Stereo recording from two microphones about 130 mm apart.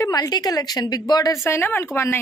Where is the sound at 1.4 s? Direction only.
15° left (ahead or behind).